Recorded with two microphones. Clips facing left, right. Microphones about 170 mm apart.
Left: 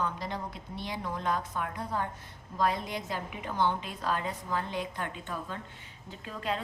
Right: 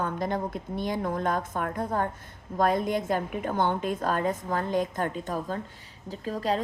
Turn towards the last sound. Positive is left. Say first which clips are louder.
# right 7 dB
turn(degrees=-40)  # may be behind; listen again after turning